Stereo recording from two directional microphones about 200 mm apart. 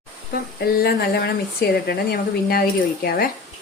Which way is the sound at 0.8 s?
50° left (ahead or behind).